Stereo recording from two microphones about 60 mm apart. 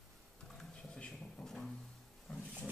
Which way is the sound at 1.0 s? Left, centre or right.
Centre.